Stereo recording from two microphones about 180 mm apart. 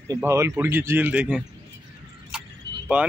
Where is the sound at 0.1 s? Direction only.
15° right (ahead or behind).